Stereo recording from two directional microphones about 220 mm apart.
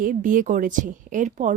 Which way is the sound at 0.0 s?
35° right (ahead or behind).